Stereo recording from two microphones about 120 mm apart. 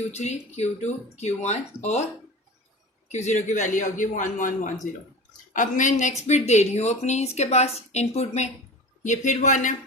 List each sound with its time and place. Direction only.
0.1 s speech: 65° left (ahead or behind)
3.1 s speech: 70° left (ahead or behind)
9.0 s speech: 90° left